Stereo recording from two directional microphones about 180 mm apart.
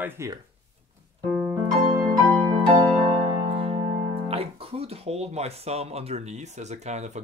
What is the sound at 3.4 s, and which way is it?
Speech, 30° right (ahead or behind).